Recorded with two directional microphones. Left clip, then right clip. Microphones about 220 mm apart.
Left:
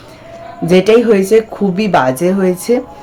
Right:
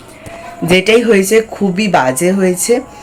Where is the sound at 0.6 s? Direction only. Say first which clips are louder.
Left 1 dB; 10° left (ahead or behind).